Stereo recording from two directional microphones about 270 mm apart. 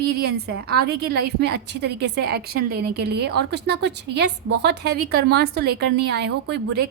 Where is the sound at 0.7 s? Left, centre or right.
Right.